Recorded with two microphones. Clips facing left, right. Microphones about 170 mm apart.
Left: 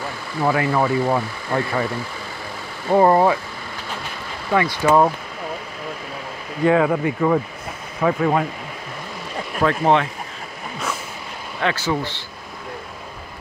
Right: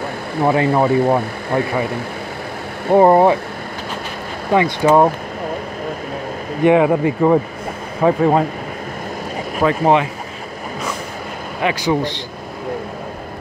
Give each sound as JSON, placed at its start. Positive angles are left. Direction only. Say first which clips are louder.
{"t": 0.4, "sound": "speech", "louder": "right 4 dB", "side_deg": -25}
{"t": 2.9, "sound": "speech", "louder": "right 4 dB", "side_deg": -20}
{"t": 4.5, "sound": "speech", "louder": "right 4 dB", "side_deg": -20}
{"t": 6.6, "sound": "speech", "louder": "right 4 dB", "side_deg": -20}
{"t": 9.6, "sound": "a man's voice", "louder": "right 3 dB", "side_deg": -5}
{"t": 11.6, "sound": "a man's voice", "louder": "right 4 dB", "side_deg": -15}